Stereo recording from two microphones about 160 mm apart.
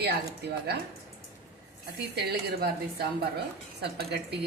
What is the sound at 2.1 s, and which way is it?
A woman's voice, 90° right.